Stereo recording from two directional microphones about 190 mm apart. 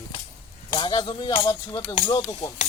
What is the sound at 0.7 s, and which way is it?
Speech, 25° left (ahead or behind).